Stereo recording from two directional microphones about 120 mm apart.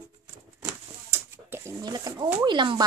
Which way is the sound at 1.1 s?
20° right (ahead or behind).